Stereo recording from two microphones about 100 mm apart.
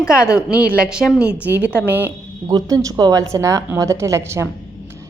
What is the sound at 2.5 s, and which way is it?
A woman's voice, 40° right (ahead or behind).